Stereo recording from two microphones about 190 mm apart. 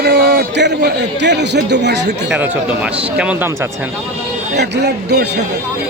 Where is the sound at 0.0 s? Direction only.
60° right (ahead or behind).